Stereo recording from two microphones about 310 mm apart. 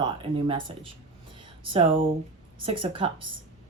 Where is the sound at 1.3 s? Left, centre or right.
Centre.